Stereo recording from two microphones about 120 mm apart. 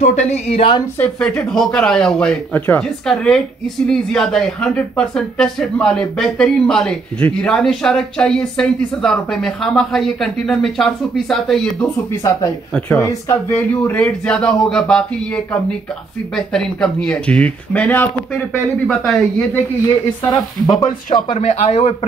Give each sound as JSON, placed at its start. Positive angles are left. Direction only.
{"t": 0.0, "sound": "speech", "side_deg": 70}
{"t": 0.9, "sound": "speech", "side_deg": 10}
{"t": 12.2, "sound": "speech", "side_deg": 30}
{"t": 18.9, "sound": "speech", "side_deg": 5}
{"t": 21.3, "sound": "speech", "side_deg": 85}